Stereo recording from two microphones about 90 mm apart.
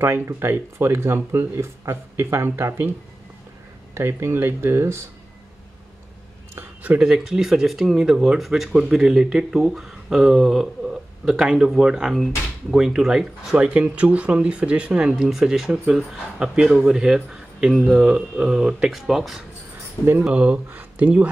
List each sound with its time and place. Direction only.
0.0 s speech: 25° right (ahead or behind)
3.9 s speech: 25° right (ahead or behind)
6.8 s speech: 10° right (ahead or behind)
13.6 s speech: 15° right (ahead or behind)
20.2 s speech: 15° right (ahead or behind)